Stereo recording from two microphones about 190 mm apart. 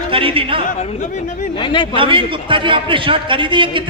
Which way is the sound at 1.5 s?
25° left (ahead or behind).